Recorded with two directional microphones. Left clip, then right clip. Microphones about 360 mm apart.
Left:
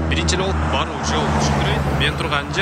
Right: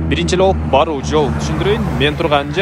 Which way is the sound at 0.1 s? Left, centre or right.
Centre.